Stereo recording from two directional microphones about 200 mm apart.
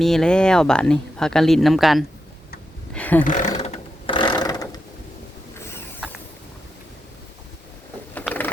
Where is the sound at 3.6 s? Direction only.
30° left (ahead or behind).